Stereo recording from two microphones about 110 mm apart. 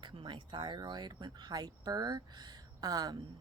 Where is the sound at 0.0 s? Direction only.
50° right (ahead or behind).